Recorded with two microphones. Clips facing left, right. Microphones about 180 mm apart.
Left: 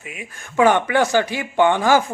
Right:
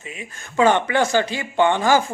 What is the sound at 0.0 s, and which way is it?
A woman's voice, 10° left (ahead or behind).